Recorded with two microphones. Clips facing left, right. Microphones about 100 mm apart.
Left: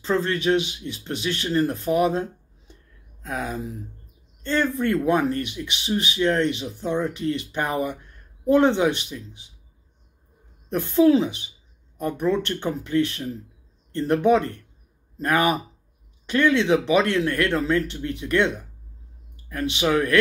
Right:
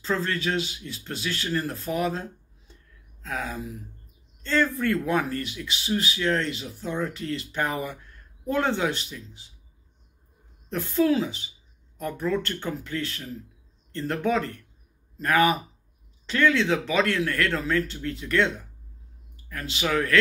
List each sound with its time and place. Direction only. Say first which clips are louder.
0.0 s speech: left 4 dB; 20° left (ahead or behind)
2.7 s a sound: left 3 dB; 20° left (ahead or behind)
4.4 s speech: left 1 dB; 20° left (ahead or behind)
10.7 s speech: left 6 dB; 20° left (ahead or behind)
19.5 s speech: left 5 dB; 20° left (ahead or behind)